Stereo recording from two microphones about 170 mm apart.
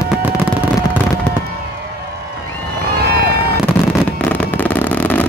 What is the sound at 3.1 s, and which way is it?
Fireworks, 70° right (ahead or behind).